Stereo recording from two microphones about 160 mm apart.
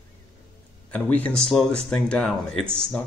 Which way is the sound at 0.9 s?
10° left (ahead or behind).